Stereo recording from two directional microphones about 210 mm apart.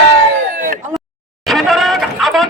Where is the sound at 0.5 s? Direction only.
40° right (ahead or behind).